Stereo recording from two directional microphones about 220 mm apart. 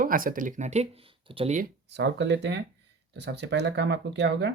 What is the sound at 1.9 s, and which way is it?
Speech, 50° right (ahead or behind).